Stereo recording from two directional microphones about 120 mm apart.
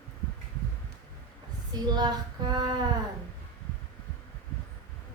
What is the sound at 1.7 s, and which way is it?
Female singing, 35° right (ahead or behind).